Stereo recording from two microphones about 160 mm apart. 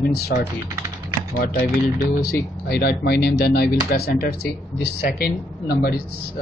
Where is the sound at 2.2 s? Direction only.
75° left (ahead or behind).